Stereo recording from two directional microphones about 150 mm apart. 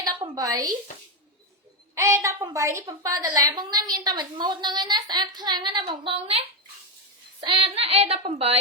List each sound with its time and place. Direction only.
0.0 s a woman's voice: 25° right (ahead or behind)
2.0 s a woman's voice: 20° right (ahead or behind); by 6.4 s 40° right (ahead or behind)
7.4 s speech: 35° right (ahead or behind)